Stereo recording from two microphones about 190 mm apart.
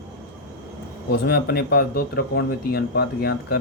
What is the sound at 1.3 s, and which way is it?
Speech, 55° left (ahead or behind).